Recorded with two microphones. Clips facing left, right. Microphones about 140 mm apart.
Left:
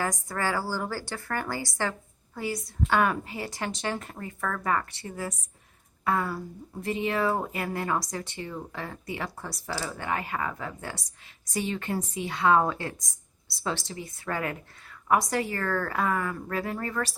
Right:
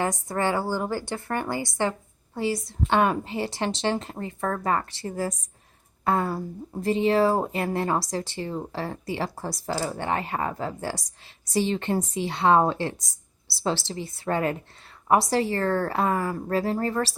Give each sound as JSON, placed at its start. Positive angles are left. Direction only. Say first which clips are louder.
{"t": 0.0, "sound": "a woman's voice", "louder": "right 4 dB", "side_deg": -25}